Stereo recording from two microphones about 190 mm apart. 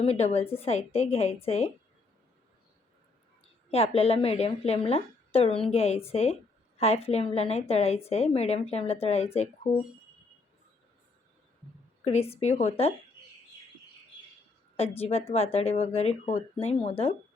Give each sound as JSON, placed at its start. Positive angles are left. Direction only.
{"t": 0.0, "sound": "a woman's voice", "side_deg": 30}
{"t": 3.7, "sound": "a woman's voice", "side_deg": 30}
{"t": 12.0, "sound": "a woman's voice", "side_deg": 30}
{"t": 14.8, "sound": "a woman's voice", "side_deg": 30}